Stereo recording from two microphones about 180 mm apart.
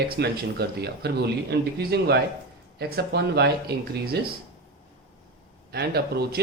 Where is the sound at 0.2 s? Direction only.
65° right (ahead or behind).